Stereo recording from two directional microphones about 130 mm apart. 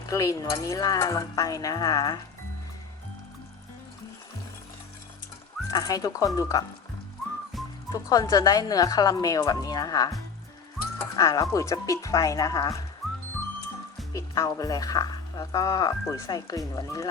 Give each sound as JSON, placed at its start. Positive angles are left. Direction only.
{"t": 0.1, "sound": "speech", "side_deg": 25}
{"t": 5.7, "sound": "speech", "side_deg": 30}
{"t": 7.2, "sound": "whistling", "side_deg": 0}
{"t": 7.9, "sound": "speech", "side_deg": 30}
{"t": 13.0, "sound": "music", "side_deg": 0}
{"t": 14.1, "sound": "speech", "side_deg": 25}